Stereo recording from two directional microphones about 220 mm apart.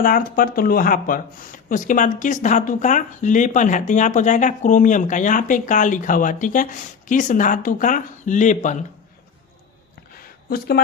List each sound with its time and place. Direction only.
0.0 s speech: 40° left (ahead or behind)
10.5 s speech: 45° left (ahead or behind)